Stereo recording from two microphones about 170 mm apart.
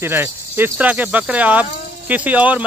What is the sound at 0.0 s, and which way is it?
Speech, 15° right (ahead or behind).